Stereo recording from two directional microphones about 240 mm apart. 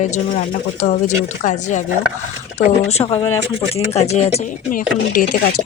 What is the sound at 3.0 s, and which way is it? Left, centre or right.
Speech, centre.